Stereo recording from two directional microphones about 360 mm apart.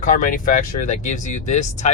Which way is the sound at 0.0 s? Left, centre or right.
Left.